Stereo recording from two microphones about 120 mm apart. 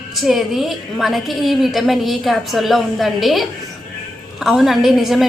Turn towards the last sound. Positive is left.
turn(degrees=0)  # may be behind; listen again after turning